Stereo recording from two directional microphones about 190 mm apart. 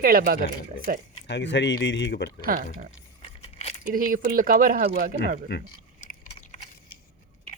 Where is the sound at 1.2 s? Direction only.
70° left (ahead or behind).